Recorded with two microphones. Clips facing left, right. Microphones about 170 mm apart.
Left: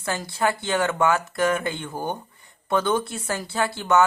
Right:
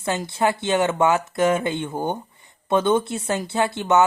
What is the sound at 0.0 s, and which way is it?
Speech, 20° right (ahead or behind).